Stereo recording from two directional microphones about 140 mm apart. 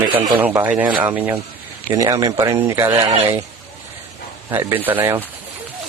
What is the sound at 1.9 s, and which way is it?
Speech, 20° right (ahead or behind).